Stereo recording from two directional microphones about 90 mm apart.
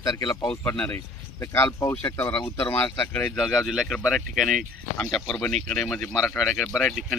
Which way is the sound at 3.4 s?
Centre (ahead or behind).